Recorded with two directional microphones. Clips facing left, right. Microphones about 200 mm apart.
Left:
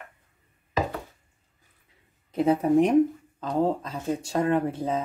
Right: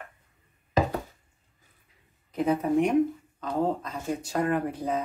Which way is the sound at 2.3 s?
30° left (ahead or behind).